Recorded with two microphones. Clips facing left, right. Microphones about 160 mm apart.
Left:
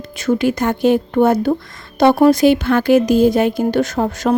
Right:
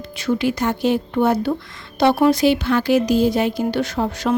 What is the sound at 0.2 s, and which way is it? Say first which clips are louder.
Speech: left 4 dB; 45° left (ahead or behind).